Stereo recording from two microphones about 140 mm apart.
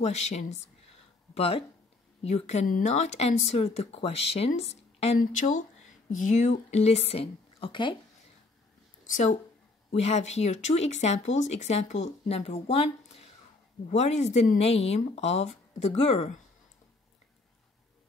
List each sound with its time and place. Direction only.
0.0 s a woman's voice: 50° left (ahead or behind)
5.2 s speech: 65° left (ahead or behind); by 8.0 s 35° left (ahead or behind)
9.0 s a woman's voice: 60° left (ahead or behind)
9.8 s speech: 50° left (ahead or behind)